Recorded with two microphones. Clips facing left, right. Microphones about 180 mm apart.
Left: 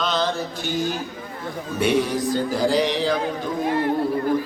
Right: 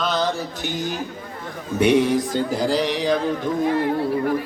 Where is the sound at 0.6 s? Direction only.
20° right (ahead or behind).